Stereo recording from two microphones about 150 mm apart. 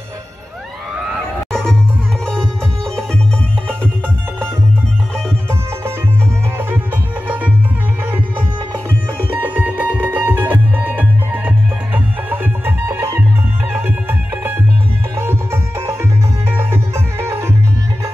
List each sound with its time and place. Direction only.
9.4 s music: 10° right (ahead or behind)